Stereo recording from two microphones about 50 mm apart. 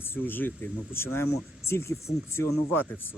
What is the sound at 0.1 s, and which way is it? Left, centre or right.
Speech, left.